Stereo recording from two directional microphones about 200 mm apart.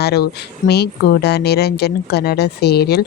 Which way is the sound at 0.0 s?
55° left (ahead or behind).